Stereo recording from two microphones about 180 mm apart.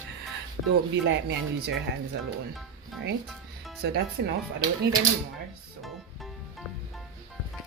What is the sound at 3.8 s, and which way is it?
Speech, 70° right (ahead or behind).